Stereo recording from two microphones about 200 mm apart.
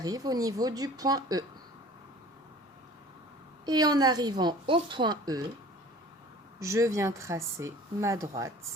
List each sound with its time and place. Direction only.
0.0 s speech: 20° right (ahead or behind)
3.7 s speech: 20° right (ahead or behind)
6.6 s speech: 15° right (ahead or behind)